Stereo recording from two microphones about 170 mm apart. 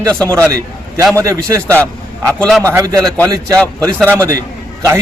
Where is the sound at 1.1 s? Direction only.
20° right (ahead or behind).